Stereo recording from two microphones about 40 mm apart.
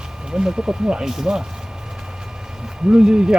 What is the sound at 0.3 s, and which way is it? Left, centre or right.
Speech, centre.